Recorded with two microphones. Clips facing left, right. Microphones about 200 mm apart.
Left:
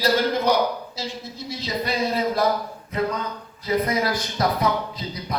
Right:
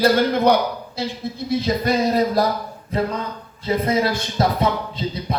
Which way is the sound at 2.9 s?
30° right (ahead or behind).